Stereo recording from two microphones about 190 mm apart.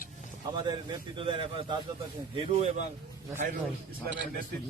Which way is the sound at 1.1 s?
25° right (ahead or behind).